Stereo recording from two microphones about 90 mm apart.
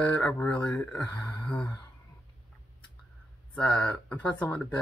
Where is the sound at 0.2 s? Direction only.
20° left (ahead or behind).